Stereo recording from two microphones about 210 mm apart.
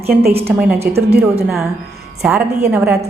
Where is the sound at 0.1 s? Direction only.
45° right (ahead or behind).